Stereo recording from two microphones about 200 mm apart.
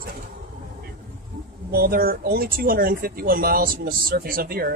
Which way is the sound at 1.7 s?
50° right (ahead or behind).